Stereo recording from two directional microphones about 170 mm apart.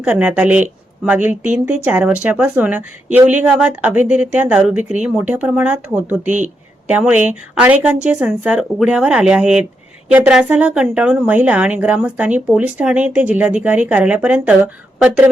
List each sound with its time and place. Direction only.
0.0 s a woman's voice: 10° right (ahead or behind)
6.2 s speech: 45° right (ahead or behind)
6.8 s a woman's voice: 10° right (ahead or behind)